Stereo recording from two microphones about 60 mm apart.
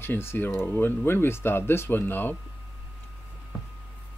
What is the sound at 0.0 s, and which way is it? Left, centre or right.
Speech, left.